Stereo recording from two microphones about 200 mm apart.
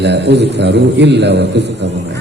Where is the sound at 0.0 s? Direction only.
55° right (ahead or behind).